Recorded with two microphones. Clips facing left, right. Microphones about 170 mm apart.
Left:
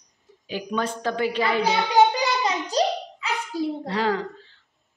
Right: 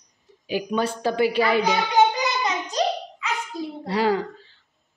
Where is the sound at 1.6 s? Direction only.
30° left (ahead or behind).